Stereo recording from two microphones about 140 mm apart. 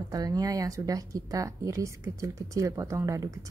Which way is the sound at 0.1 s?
25° right (ahead or behind).